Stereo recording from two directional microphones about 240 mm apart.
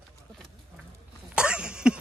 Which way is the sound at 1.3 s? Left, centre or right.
Centre.